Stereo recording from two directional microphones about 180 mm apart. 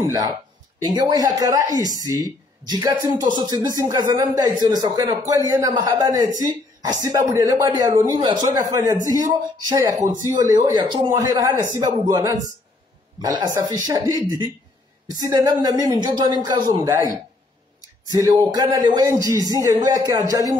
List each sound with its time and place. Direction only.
0.0 s a man's voice: 20° right (ahead or behind)
18.1 s a man's voice: 20° right (ahead or behind)